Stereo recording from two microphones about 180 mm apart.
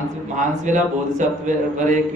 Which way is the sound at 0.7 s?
45° right (ahead or behind).